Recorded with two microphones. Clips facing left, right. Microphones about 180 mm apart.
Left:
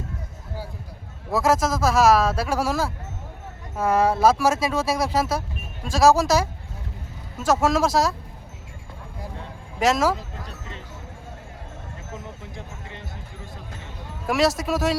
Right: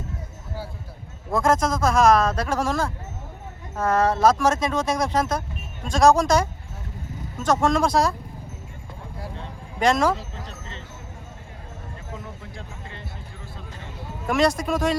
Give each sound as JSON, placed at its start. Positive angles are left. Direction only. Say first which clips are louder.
{"t": 1.3, "sound": "speech", "louder": "even", "side_deg": 5}
{"t": 9.7, "sound": "speech", "louder": "even", "side_deg": 0}
{"t": 12.1, "sound": "speech", "louder": "left 1 dB", "side_deg": 20}
{"t": 14.3, "sound": "speech", "louder": "even", "side_deg": 0}